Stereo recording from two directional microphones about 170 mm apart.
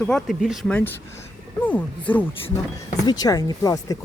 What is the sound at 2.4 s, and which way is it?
Speech, 25° left (ahead or behind).